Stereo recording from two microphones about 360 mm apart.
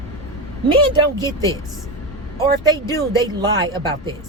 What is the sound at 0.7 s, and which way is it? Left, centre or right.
Speech, centre.